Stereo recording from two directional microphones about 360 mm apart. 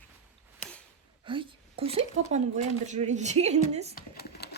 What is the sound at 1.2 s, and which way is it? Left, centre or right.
Speech, centre.